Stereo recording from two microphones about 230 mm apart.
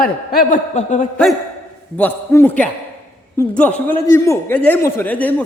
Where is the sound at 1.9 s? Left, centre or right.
Centre.